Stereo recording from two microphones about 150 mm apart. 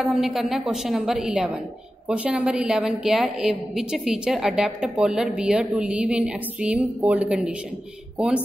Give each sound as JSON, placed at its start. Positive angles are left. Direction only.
{"t": 0.0, "sound": "a woman's voice", "side_deg": 0}